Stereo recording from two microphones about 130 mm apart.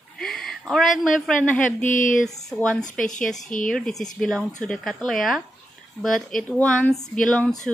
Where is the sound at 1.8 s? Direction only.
85° left.